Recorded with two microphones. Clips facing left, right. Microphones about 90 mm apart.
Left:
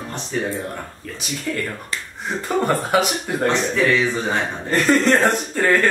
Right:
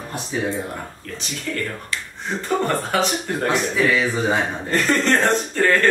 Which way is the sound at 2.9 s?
10° left (ahead or behind).